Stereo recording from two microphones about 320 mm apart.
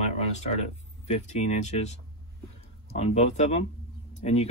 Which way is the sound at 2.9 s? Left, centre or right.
Centre.